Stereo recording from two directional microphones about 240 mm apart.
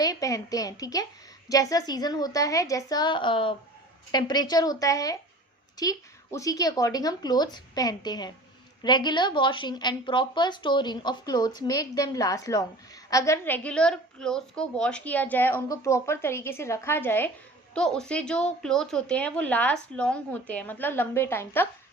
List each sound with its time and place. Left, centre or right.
0.0 s a woman's voice: centre